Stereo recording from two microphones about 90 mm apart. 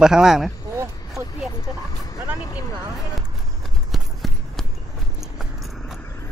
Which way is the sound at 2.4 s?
40° left (ahead or behind).